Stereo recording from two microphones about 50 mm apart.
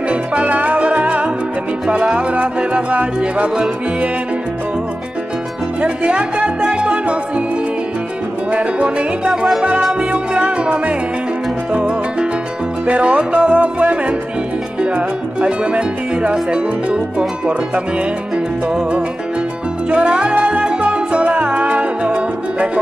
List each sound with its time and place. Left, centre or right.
0.1 s music: right
5.8 s music: right
8.5 s music: right
19.9 s music: right